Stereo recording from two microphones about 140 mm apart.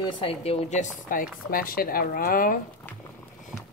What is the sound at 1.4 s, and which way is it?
Speech, 90° left.